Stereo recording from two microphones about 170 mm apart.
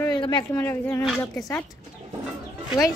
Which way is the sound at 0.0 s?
25° left (ahead or behind).